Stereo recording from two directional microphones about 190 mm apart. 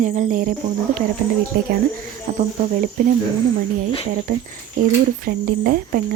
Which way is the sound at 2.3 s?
45° right (ahead or behind).